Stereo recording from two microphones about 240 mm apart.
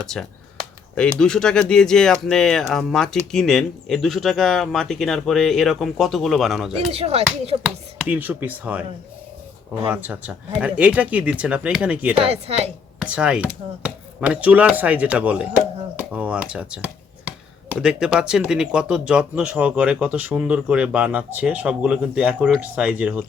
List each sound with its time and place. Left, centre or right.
0.0 s speech: centre
6.7 s speech: right
7.6 s speech: centre
9.8 s speech: centre
12.2 s speech: right
13.0 s speech: centre